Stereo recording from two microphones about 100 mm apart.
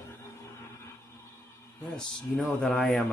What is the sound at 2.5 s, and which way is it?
Speech, 10° left (ahead or behind).